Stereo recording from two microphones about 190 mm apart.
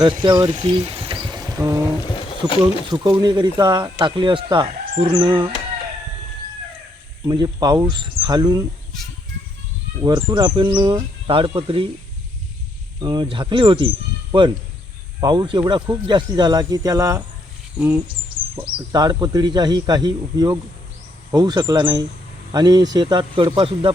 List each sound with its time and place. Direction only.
0.0 s speech: 25° right (ahead or behind)
2.1 s a sound: 25° left (ahead or behind)
2.9 s speech: 20° right (ahead or behind)
7.3 s speech: 20° right (ahead or behind)
10.0 s speech: 20° right (ahead or behind)
13.0 s speech: 25° right (ahead or behind)
18.6 s speech: 20° right (ahead or behind)